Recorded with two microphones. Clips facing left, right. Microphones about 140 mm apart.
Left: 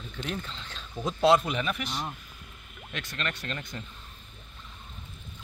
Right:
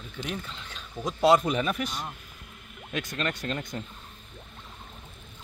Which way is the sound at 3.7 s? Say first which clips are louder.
Right 4 dB; 25° right (ahead or behind).